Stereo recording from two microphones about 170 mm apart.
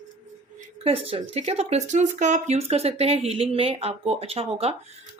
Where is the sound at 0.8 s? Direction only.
35° right (ahead or behind).